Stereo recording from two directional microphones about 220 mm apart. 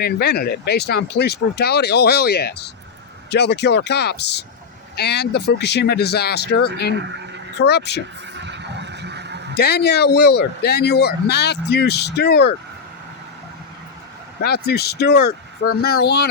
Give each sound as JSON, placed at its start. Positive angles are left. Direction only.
{"t": 0.0, "sound": "speech", "side_deg": 45}
{"t": 7.0, "sound": "speech", "side_deg": -50}
{"t": 7.6, "sound": "speech", "side_deg": 50}
{"t": 8.4, "sound": "a sound", "side_deg": -55}
{"t": 9.6, "sound": "speech", "side_deg": 50}
{"t": 14.4, "sound": "speech", "side_deg": 45}